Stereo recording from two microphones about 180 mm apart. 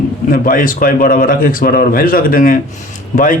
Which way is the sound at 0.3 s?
50° left (ahead or behind).